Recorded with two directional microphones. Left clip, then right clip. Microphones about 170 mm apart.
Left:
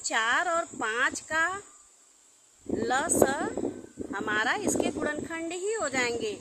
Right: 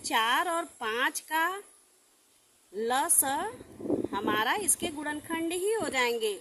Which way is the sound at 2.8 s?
25° right (ahead or behind).